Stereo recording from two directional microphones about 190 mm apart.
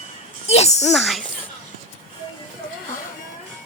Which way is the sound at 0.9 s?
Centre (ahead or behind).